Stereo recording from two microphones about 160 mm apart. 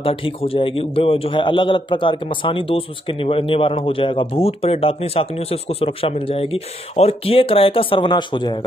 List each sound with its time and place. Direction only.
0.0 s a man's voice: 35° left (ahead or behind)